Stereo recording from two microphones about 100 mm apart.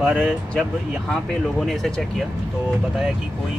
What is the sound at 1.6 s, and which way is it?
Speech, 5° left (ahead or behind).